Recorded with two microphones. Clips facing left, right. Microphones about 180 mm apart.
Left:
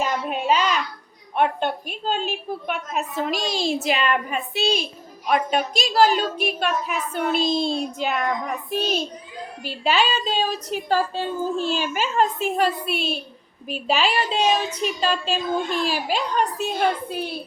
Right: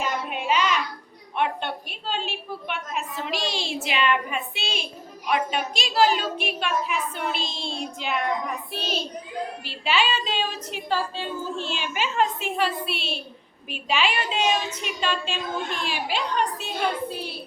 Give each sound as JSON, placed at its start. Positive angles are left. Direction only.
{"t": 0.3, "sound": "a sound", "side_deg": 40}
{"t": 1.4, "sound": "a woman's voice", "side_deg": 45}
{"t": 9.6, "sound": "a woman's voice", "side_deg": 40}